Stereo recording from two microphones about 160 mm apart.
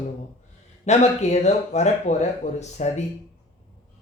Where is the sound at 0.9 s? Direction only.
45° left (ahead or behind).